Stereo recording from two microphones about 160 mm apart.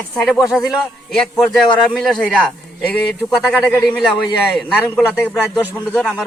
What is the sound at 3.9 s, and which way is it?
A man's voice, centre (ahead or behind).